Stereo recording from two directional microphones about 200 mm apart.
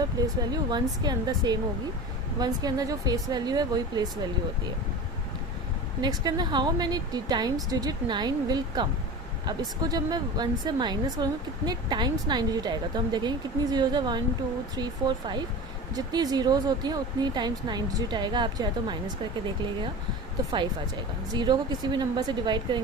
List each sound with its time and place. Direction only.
0.2 s speech: 20° right (ahead or behind)
6.0 s speech: 20° right (ahead or behind)
21.3 s speech: 20° right (ahead or behind)